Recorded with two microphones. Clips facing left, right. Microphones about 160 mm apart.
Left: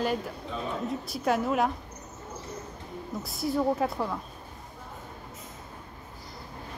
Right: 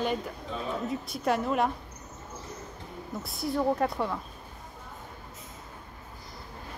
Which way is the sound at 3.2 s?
Centre (ahead or behind).